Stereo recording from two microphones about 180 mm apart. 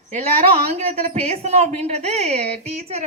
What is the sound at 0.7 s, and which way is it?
A woman's voice, 35° right (ahead or behind).